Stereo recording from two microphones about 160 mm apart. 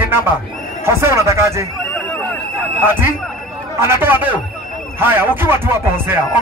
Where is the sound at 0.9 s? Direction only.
15° right (ahead or behind).